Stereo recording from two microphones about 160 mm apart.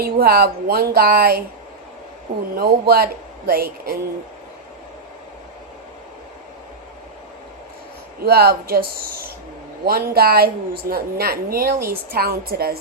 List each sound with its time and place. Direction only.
0.0 s a woman's voice: 70° right (ahead or behind)
2.6 s a woman's voice: 70° right (ahead or behind)
8.2 s a woman's voice: 75° right (ahead or behind)